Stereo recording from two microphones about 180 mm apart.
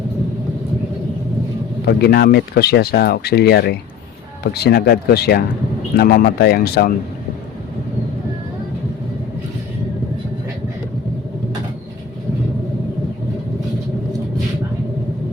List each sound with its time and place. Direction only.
1.8 s speech: 65° left (ahead or behind)